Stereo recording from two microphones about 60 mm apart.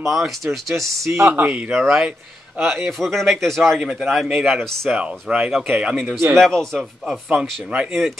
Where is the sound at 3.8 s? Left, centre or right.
Centre.